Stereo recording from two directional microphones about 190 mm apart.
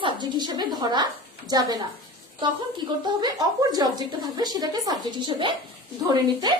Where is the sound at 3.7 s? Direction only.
20° right (ahead or behind).